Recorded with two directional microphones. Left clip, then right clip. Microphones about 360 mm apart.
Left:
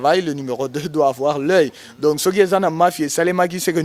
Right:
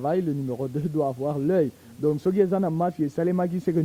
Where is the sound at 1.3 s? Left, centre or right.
Centre.